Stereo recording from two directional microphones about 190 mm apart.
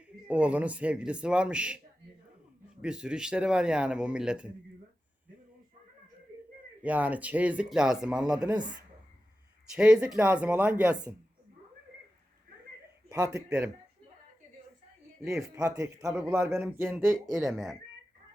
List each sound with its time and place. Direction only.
0.3 s a man's voice: 5° right (ahead or behind)
2.8 s a man's voice: 5° right (ahead or behind)
6.8 s a man's voice: 5° right (ahead or behind)
8.5 s speech: 20° right (ahead or behind)
9.7 s speech: 5° right (ahead or behind)
13.1 s a man's voice: 20° right (ahead or behind)
15.3 s a man's voice: centre (ahead or behind)
15.6 s a man's voice: 15° right (ahead or behind); by 17.7 s centre (ahead or behind)